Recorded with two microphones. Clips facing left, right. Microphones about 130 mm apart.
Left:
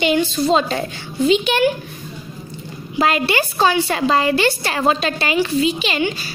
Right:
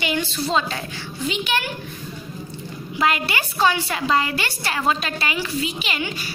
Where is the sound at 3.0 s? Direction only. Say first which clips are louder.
Left 5 dB; 30° left (ahead or behind).